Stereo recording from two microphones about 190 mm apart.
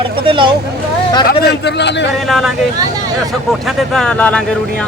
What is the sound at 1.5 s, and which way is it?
Speech, 65° left (ahead or behind).